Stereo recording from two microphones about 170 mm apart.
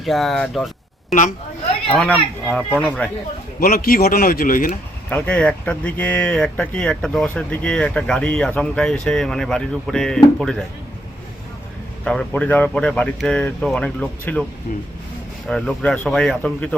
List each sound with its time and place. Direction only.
0.0 s speech: centre (ahead or behind)
1.9 s speech: 5° left (ahead or behind)
3.6 s speech: 60° left (ahead or behind)
5.0 s speech: 10° left (ahead or behind)
12.0 s speech: 5° left (ahead or behind)
14.7 s speech: 50° left (ahead or behind)
15.4 s speech: 5° left (ahead or behind)